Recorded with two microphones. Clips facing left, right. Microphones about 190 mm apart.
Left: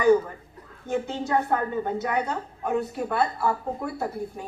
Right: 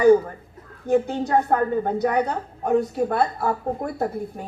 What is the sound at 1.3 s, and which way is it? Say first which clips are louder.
A woman's voice: right 4 dB; 40° right (ahead or behind).